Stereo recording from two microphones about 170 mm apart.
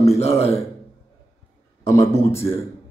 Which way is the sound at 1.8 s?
15° left (ahead or behind).